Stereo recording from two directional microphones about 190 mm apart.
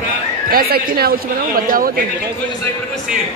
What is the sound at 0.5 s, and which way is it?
Speech, 55° right (ahead or behind).